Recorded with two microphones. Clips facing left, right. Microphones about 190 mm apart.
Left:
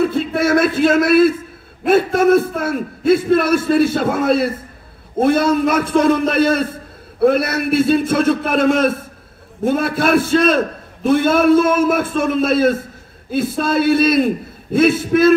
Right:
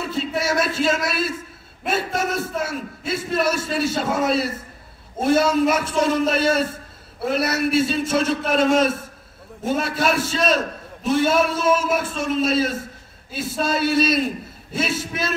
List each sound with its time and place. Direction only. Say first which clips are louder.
0.0 s a man's voice: left 8 dB; 55° left (ahead or behind)